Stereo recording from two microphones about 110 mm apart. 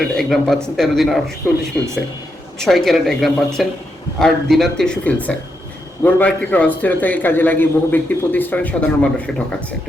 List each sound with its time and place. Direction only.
0.2 s a man's voice: centre (ahead or behind)